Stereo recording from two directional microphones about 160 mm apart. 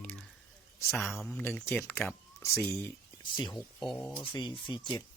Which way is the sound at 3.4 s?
30° left (ahead or behind).